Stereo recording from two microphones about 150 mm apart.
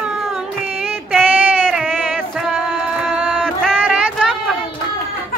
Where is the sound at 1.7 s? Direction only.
5° left (ahead or behind).